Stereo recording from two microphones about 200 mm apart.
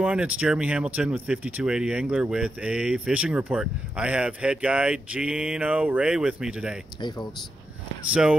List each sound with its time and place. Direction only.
0.0 s speech: 5° right (ahead or behind)
7.0 s speech: 20° left (ahead or behind)
8.1 s speech: 5° right (ahead or behind)